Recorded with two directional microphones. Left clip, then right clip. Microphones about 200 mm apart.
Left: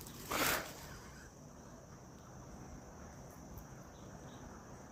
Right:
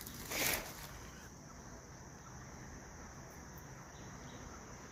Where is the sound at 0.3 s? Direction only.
25° left (ahead or behind).